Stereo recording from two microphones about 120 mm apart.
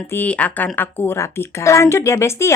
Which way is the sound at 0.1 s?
15° left (ahead or behind).